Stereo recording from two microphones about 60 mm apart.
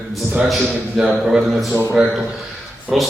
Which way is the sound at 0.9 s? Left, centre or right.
Centre.